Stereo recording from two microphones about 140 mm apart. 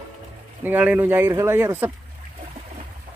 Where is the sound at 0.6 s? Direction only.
10° right (ahead or behind).